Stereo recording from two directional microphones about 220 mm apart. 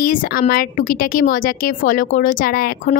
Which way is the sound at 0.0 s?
40° left (ahead or behind).